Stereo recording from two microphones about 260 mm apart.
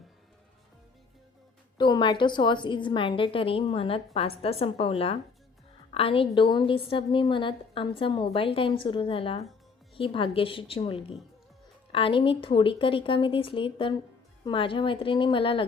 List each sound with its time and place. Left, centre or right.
1.8 s a woman's voice: centre